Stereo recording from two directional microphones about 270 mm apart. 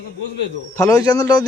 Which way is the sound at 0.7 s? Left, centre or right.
Centre.